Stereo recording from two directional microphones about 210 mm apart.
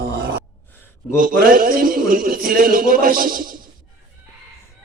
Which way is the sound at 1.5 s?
40° right (ahead or behind).